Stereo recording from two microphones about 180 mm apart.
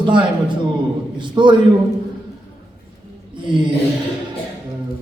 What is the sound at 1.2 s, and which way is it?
Speech, 25° right (ahead or behind).